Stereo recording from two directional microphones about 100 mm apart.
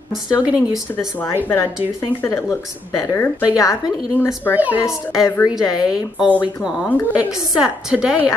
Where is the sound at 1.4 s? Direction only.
25° left (ahead or behind).